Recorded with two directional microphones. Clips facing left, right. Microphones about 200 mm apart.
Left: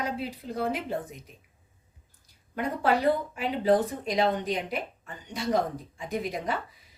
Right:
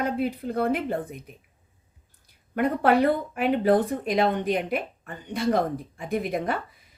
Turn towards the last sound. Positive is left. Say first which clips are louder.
# right 4 dB
turn(degrees=-55)  # may be behind; listen again after turning